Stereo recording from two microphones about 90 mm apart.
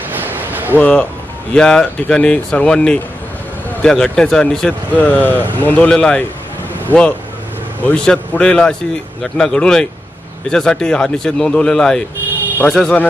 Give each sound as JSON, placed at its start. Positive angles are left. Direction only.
{"t": 0.1, "sound": "a sound", "side_deg": -20}
{"t": 0.7, "sound": "speech", "side_deg": 15}
{"t": 4.9, "sound": "speech", "side_deg": 15}
{"t": 7.8, "sound": "speech", "side_deg": 10}